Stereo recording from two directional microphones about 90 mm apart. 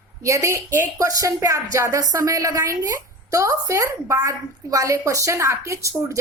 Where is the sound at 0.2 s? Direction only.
35° right (ahead or behind).